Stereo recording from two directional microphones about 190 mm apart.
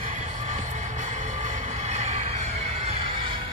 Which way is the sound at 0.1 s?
40° right (ahead or behind).